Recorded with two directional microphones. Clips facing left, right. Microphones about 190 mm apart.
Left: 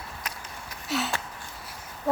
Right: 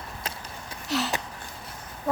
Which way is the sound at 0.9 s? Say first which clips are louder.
Right 1 dB; centre (ahead or behind).